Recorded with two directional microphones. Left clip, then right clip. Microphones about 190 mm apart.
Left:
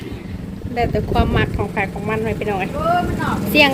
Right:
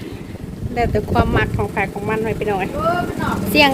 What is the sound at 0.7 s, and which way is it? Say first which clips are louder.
Speech: right 1 dB; 5° right (ahead or behind).